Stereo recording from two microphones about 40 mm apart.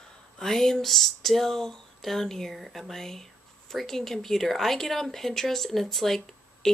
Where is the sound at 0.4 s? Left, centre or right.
Centre.